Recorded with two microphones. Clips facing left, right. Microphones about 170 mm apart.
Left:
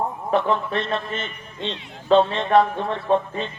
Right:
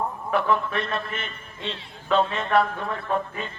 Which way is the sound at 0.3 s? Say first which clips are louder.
Left 2 dB; 25° left (ahead or behind).